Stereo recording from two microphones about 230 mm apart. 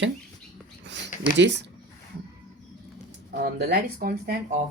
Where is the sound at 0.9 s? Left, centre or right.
Right.